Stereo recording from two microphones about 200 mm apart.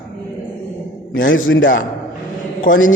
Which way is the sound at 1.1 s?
75° left (ahead or behind).